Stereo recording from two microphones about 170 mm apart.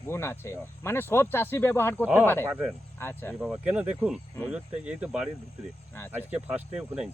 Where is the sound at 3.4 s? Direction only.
5° right (ahead or behind).